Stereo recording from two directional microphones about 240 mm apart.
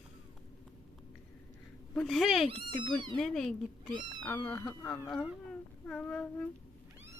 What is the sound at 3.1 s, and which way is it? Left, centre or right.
Speech, centre.